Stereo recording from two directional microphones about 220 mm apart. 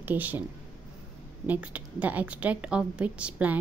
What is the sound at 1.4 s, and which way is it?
A woman's voice, 5° right (ahead or behind).